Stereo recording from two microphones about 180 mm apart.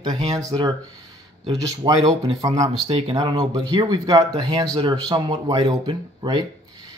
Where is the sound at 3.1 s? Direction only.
20° right (ahead or behind).